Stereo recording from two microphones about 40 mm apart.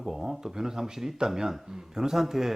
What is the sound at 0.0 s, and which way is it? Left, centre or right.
Speech, centre.